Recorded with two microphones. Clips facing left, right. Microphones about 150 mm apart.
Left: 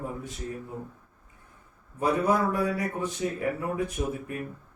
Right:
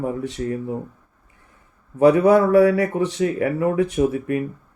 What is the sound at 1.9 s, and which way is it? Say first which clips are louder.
Speech: right 11 dB; 80° right.